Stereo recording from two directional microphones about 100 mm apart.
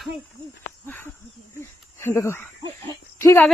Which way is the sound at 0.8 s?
20° left (ahead or behind).